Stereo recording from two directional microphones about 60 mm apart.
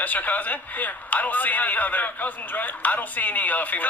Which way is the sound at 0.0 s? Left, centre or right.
Left.